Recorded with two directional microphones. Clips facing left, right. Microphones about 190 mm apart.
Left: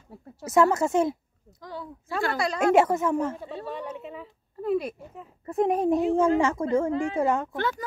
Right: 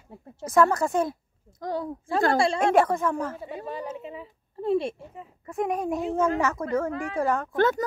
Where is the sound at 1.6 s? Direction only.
45° right (ahead or behind).